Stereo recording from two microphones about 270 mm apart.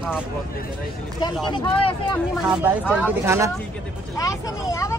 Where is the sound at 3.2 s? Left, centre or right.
Centre.